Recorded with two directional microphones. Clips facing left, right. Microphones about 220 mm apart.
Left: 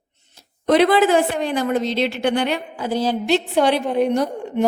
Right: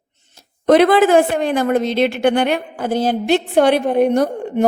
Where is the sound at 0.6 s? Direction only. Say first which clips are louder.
Right 3 dB; 50° right (ahead or behind).